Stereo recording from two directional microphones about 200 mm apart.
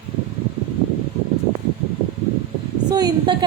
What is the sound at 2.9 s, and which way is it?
Speech, 20° right (ahead or behind).